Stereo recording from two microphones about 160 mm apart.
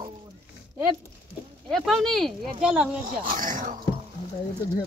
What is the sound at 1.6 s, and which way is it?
Speech, centre (ahead or behind).